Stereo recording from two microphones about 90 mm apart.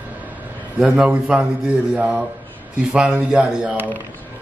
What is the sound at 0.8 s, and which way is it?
Speech, 10° right (ahead or behind).